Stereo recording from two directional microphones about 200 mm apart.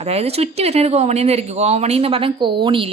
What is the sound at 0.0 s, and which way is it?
A woman's voice, 30° right (ahead or behind).